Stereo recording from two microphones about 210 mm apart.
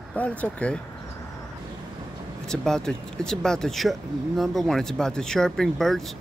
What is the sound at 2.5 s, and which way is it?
Speech, 5° left (ahead or behind).